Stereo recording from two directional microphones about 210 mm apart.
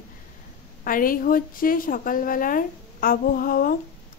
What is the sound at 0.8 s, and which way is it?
A woman's voice, 40° left (ahead or behind).